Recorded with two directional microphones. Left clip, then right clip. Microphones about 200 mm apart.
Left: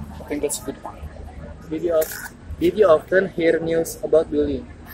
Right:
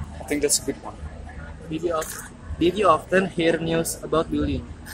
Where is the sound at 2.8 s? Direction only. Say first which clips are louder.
Left 4 dB; 50° right (ahead or behind).